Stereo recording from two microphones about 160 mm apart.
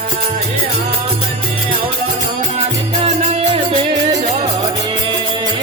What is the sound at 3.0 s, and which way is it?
Music, 45° right (ahead or behind).